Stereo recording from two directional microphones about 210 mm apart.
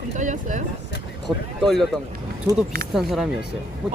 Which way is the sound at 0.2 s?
35° right (ahead or behind).